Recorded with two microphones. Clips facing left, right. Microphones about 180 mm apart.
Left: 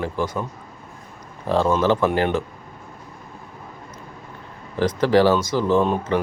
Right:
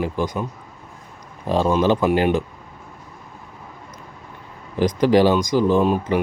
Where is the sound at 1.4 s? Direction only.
15° right (ahead or behind).